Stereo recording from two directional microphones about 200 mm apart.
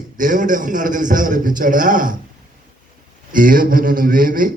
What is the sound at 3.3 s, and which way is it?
A man's voice, 45° right (ahead or behind).